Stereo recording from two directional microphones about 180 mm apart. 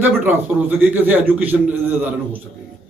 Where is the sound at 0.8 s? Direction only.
10° right (ahead or behind).